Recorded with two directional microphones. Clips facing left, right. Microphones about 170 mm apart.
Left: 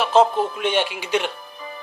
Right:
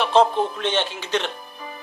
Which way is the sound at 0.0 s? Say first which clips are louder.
Left 1 dB; 5° left (ahead or behind).